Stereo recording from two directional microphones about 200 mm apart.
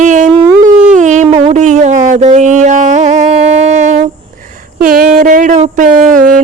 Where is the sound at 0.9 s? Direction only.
40° right (ahead or behind).